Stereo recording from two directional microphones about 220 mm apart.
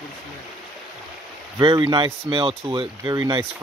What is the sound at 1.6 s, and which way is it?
Speech, 20° right (ahead or behind).